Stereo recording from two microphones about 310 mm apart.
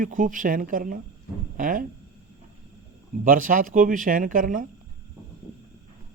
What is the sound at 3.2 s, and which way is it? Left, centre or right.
Speech, right.